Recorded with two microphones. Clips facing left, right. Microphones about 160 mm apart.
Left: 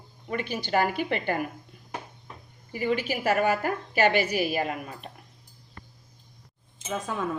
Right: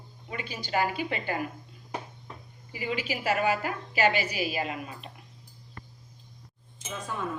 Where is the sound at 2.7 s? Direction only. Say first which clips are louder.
Left 5 dB; 50° left (ahead or behind).